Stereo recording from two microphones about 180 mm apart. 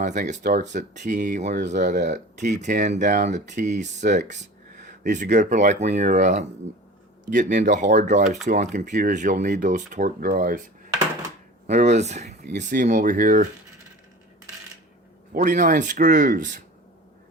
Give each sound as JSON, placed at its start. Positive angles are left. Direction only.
{"t": 0.0, "sound": "speech", "side_deg": -45}
{"t": 11.6, "sound": "speech", "side_deg": -40}
{"t": 15.3, "sound": "speech", "side_deg": -45}